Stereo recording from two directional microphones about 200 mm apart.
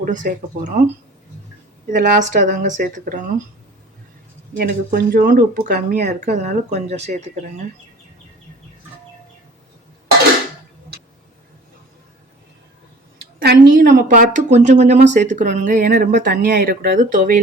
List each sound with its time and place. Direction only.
0.0 s speech: 40° right (ahead or behind)
1.9 s speech: 40° right (ahead or behind)
4.5 s speech: 50° right (ahead or behind)
13.7 s speech: 40° right (ahead or behind)